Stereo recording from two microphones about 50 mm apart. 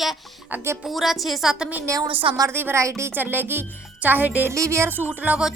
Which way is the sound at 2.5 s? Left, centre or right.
Right.